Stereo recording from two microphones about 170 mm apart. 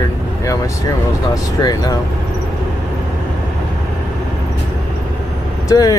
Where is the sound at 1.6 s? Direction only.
20° left (ahead or behind).